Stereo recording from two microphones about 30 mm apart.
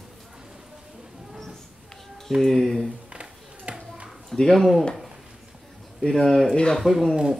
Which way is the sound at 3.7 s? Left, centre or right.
Right.